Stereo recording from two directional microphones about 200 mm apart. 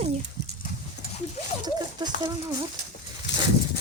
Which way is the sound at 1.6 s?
20° right (ahead or behind).